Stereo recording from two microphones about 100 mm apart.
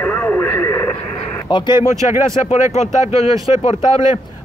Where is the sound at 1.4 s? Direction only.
50° left (ahead or behind).